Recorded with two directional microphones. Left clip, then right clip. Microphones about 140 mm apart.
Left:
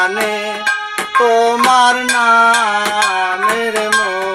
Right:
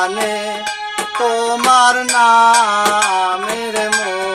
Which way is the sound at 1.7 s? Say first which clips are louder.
Even; 30° right (ahead or behind).